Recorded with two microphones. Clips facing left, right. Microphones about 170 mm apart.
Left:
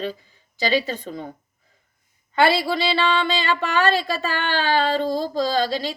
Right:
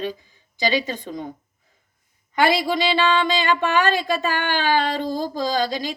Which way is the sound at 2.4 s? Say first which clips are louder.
Right 1 dB; 15° right (ahead or behind).